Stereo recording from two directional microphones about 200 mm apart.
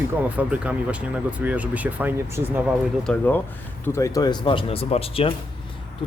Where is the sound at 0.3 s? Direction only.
5° right (ahead or behind).